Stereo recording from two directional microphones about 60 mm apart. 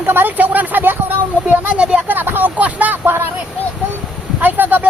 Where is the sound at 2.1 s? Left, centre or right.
Right.